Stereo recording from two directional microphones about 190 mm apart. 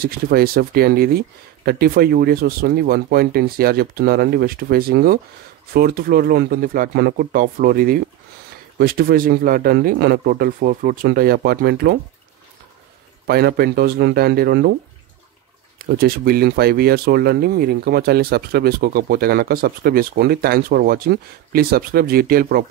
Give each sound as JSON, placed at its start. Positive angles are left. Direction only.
{"t": 0.0, "sound": "speech", "side_deg": -50}
{"t": 13.3, "sound": "speech", "side_deg": -55}
{"t": 16.0, "sound": "speech", "side_deg": -55}